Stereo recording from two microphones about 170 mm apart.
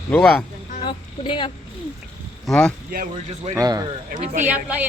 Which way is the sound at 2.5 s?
5° left (ahead or behind).